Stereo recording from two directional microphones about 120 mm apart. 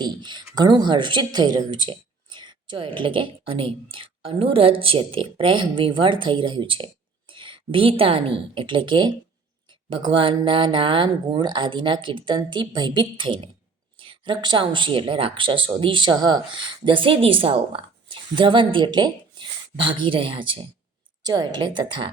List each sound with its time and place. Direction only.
0.0 s a sound: 40° right (ahead or behind)
0.5 s speech: 35° right (ahead or behind)
21.2 s a woman's voice: 35° right (ahead or behind)